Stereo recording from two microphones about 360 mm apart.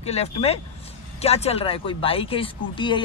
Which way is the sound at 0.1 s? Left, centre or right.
Centre.